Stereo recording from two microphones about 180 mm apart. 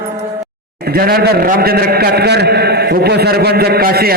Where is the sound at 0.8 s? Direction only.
55° right (ahead or behind).